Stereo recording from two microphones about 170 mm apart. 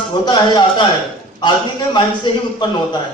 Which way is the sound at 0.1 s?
25° left (ahead or behind).